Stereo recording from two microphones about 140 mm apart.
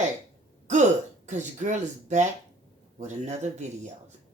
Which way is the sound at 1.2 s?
60° right (ahead or behind).